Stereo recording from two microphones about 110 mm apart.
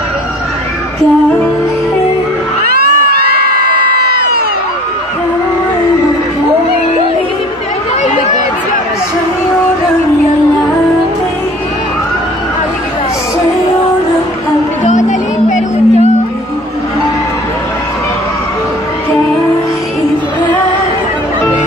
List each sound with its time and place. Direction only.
14.9 s music: 90° left